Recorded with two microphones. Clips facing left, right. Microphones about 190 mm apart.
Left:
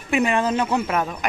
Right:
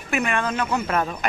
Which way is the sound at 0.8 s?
10° left (ahead or behind).